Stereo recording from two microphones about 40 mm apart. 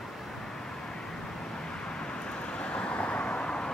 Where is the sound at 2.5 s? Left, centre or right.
Left.